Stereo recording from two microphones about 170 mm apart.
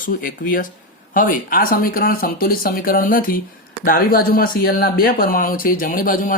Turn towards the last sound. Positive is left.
turn(degrees=55)  # may be behind; listen again after turning